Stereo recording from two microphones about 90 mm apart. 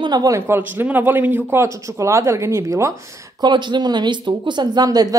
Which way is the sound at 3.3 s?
55° right (ahead or behind).